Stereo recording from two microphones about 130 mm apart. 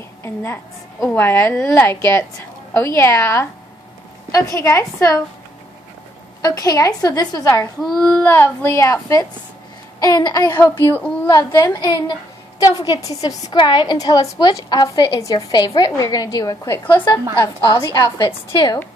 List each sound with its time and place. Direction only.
0.2 s a woman's voice: 20° left (ahead or behind)
6.4 s a woman's voice: 30° left (ahead or behind)
7.8 s a child's voice: 5° left (ahead or behind); by 10.4 s 30° left (ahead or behind)
10.5 s a child's voice: 20° left (ahead or behind)
11.5 s a woman's voice: 30° left (ahead or behind)
17.6 s a woman's voice: 30° left (ahead or behind)